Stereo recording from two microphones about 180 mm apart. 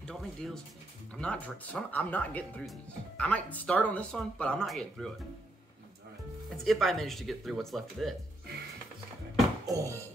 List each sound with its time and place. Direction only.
0.0 s speech: 5° left (ahead or behind)
6.5 s speech: centre (ahead or behind)
9.7 s music: 15° right (ahead or behind)